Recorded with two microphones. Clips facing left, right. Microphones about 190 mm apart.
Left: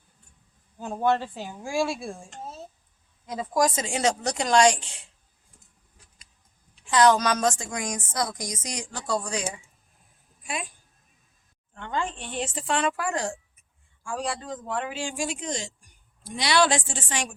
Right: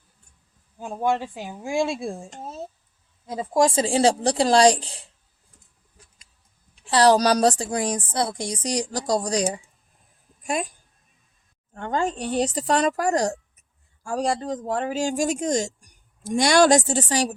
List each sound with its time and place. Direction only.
0.8 s speech: 10° right (ahead or behind)
3.2 s speech: 25° right (ahead or behind)
6.8 s speech: 35° right (ahead or behind)
11.7 s speech: 45° right (ahead or behind)